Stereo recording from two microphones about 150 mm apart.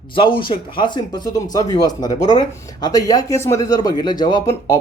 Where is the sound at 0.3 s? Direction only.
35° left (ahead or behind).